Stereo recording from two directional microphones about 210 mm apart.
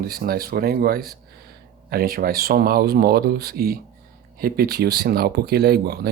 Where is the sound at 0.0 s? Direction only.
45° right (ahead or behind).